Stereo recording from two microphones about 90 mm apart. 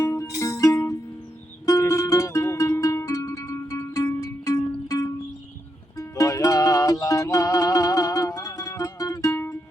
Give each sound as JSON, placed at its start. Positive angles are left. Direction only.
{"t": 0.0, "sound": "music", "side_deg": 35}